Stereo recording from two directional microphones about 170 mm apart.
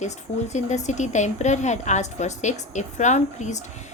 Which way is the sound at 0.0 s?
45° left (ahead or behind).